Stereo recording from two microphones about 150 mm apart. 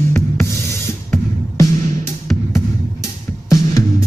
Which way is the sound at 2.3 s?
Centre (ahead or behind).